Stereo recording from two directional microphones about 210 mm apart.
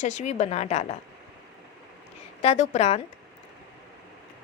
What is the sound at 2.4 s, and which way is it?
Speech, 30° left (ahead or behind).